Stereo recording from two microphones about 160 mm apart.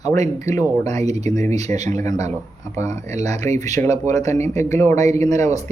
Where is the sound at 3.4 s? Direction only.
15° left (ahead or behind).